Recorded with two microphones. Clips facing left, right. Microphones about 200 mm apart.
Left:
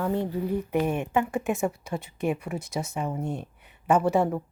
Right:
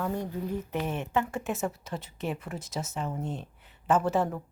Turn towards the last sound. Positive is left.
turn(degrees=10)  # may be behind; listen again after turning